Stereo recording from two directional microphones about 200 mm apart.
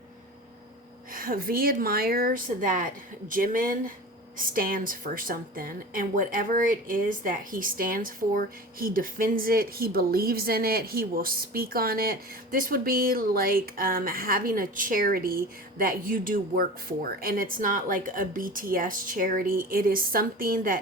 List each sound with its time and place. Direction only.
1.1 s speech: 45° right (ahead or behind)